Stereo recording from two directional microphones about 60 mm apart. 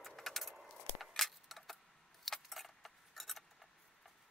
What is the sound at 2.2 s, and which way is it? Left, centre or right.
Keys jangling, centre.